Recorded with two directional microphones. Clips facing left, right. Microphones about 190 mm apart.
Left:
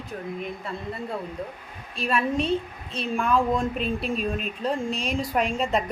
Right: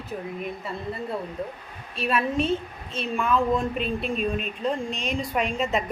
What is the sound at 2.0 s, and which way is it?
A woman's voice, centre (ahead or behind).